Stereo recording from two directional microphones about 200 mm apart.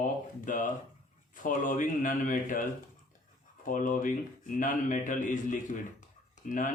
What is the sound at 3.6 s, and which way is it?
A man's voice, 40° left (ahead or behind).